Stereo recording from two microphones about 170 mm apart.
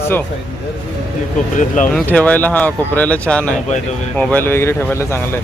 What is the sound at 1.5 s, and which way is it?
Speech, 50° left (ahead or behind).